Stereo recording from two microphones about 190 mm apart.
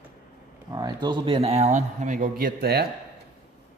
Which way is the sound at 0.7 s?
20° right (ahead or behind).